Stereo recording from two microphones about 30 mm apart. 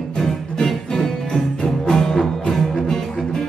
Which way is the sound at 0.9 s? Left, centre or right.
Left.